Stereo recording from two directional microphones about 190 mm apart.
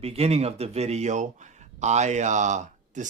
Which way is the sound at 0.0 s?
30° right (ahead or behind).